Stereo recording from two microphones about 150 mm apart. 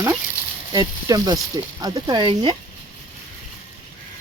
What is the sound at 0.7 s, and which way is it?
Speech, 25° right (ahead or behind).